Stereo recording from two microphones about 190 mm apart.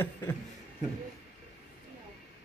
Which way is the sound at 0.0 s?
10° left (ahead or behind).